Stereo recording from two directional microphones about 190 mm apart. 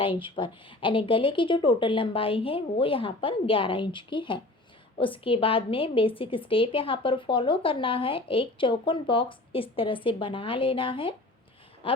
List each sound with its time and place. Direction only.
0.0 s a woman's voice: 25° left (ahead or behind)